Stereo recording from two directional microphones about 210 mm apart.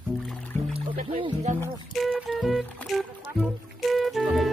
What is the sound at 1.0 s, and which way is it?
Music, 25° right (ahead or behind).